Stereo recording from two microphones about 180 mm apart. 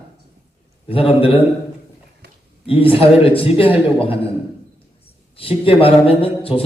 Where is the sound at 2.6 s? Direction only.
30° left (ahead or behind).